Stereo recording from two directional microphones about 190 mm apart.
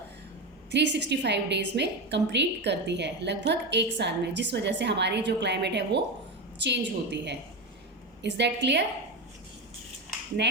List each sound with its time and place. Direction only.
0.7 s a woman's voice: 65° right (ahead or behind)